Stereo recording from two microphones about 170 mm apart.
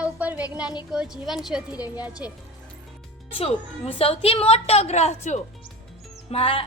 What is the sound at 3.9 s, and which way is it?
A woman's voice, 35° left (ahead or behind).